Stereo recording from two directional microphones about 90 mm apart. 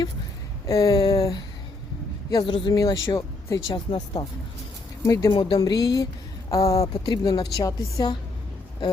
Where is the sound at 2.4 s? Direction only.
65° left (ahead or behind).